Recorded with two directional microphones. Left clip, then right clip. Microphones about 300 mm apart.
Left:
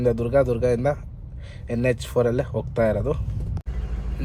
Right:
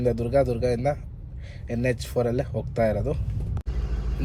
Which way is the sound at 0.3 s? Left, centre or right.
Left.